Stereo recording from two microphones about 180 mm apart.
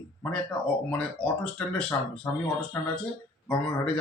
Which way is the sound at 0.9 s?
5° left (ahead or behind).